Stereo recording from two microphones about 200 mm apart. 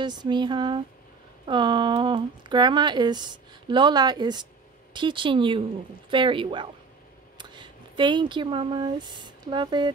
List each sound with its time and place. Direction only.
0.0 s speech: 20° right (ahead or behind)